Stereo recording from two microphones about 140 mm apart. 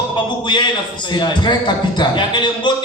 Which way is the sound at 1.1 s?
30° left (ahead or behind).